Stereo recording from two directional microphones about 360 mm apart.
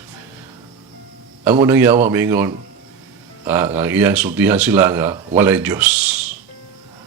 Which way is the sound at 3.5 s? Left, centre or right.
Centre.